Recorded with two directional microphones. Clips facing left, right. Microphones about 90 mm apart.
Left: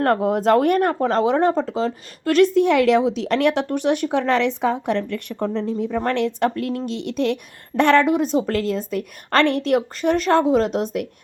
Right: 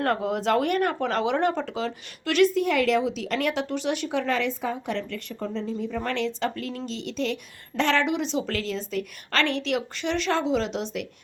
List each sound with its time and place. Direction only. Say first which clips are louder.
0.0 s speech: left 7 dB; 45° left (ahead or behind)
2.6 s a woman's voice: left 6 dB; 55° left (ahead or behind)